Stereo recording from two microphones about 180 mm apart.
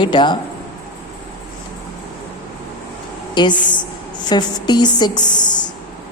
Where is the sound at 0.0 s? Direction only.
25° left (ahead or behind).